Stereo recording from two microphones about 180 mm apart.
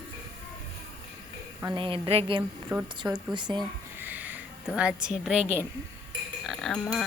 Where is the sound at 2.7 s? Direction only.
10° right (ahead or behind).